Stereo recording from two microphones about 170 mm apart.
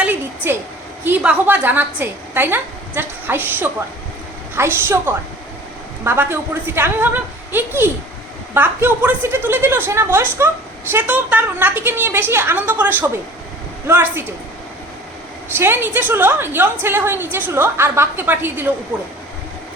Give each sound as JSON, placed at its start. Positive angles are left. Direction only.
{"t": 0.0, "sound": "a sound", "side_deg": -10}
{"t": 1.0, "sound": "a woman's voice", "side_deg": -10}
{"t": 15.5, "sound": "a woman's voice", "side_deg": -15}